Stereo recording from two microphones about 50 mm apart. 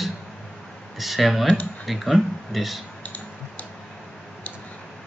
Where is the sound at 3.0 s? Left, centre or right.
Left.